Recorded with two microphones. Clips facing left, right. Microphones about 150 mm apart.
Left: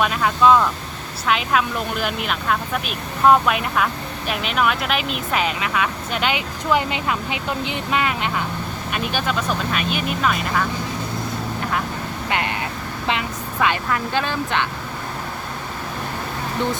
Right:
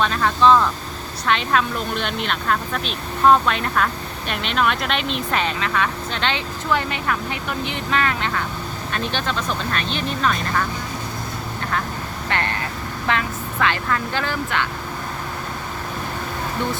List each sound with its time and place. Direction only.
0.0 s speech: 10° left (ahead or behind)
12.3 s speech: 15° left (ahead or behind)